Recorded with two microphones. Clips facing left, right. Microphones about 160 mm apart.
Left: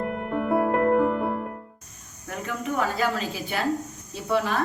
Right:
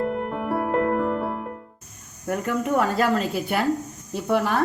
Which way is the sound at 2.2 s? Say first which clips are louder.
Right 6 dB; 55° right (ahead or behind).